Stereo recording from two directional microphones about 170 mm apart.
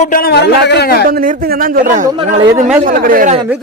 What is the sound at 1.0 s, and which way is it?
Speech, 55° right (ahead or behind).